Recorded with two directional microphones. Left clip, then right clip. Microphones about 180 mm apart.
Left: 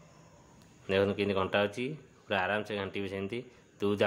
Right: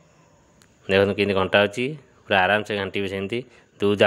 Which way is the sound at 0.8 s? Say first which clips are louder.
Right 9 dB; 30° right (ahead or behind).